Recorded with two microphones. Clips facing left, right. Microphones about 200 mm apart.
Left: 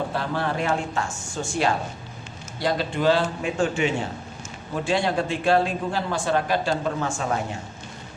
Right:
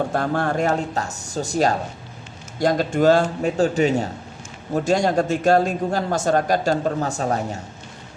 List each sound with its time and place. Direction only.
0.1 s a man's voice: 50° right (ahead or behind)